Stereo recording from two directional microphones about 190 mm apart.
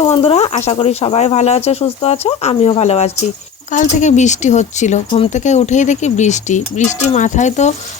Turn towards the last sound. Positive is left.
turn(degrees=40)  # may be behind; listen again after turning